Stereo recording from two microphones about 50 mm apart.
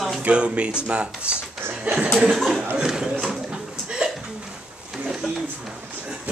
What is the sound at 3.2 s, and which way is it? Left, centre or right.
Chuckle, centre.